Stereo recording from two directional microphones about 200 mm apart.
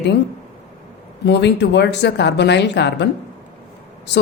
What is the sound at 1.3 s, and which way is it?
A woman's voice, 60° left (ahead or behind).